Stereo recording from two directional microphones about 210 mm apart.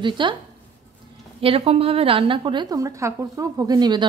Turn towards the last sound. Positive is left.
turn(degrees=-20)  # may be behind; listen again after turning